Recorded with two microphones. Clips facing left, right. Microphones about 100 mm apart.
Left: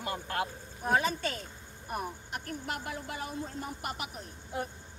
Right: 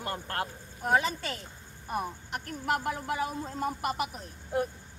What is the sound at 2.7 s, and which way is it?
Speech, 55° right (ahead or behind).